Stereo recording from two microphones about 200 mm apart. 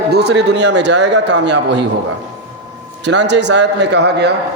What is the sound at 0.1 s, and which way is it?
A man's voice, 55° right (ahead or behind).